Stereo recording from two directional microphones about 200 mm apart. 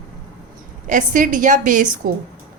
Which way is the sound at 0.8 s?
40° right (ahead or behind).